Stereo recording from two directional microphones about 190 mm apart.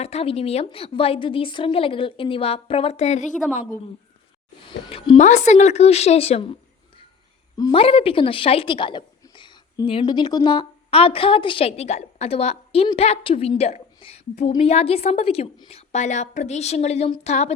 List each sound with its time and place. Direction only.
0.0 s a woman's voice: 35° left (ahead or behind)
4.7 s a woman's voice: 30° left (ahead or behind)